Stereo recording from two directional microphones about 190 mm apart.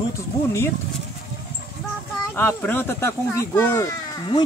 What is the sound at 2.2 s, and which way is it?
Speech, 10° left (ahead or behind).